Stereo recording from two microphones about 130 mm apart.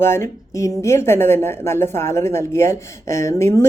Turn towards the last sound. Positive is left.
turn(degrees=20)  # may be behind; listen again after turning